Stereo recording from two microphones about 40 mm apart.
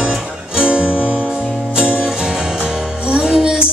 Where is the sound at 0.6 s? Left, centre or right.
Right.